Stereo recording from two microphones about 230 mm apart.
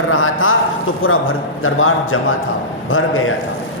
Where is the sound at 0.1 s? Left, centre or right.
Left.